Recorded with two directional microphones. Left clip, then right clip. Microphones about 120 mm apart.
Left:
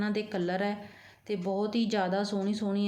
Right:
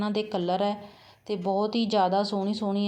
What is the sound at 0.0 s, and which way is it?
A woman's voice, 20° right (ahead or behind).